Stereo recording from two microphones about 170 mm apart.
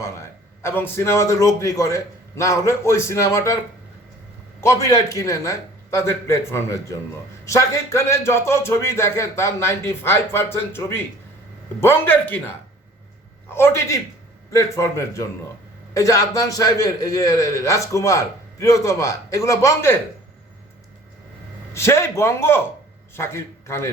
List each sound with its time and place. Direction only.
0.0 s a man's voice: 15° left (ahead or behind)
4.6 s a man's voice: 20° left (ahead or behind)
21.7 s a man's voice: 15° left (ahead or behind)